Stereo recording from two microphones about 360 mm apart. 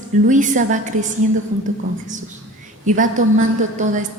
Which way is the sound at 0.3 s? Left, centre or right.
Right.